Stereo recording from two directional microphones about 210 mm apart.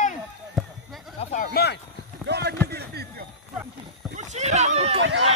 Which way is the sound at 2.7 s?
50° right (ahead or behind).